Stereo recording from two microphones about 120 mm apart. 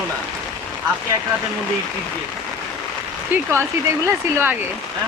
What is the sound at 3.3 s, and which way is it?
Speech, 15° right (ahead or behind).